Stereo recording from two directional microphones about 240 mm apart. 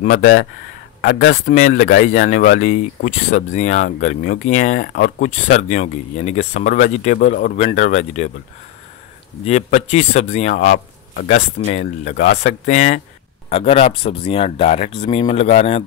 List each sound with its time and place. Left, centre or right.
0.0 s speech: left
9.4 s speech: left